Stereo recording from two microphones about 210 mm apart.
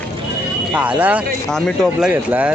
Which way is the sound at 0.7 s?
5° right (ahead or behind).